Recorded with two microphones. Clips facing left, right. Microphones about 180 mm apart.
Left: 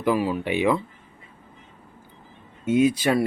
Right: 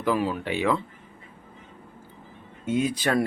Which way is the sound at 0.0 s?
10° left (ahead or behind).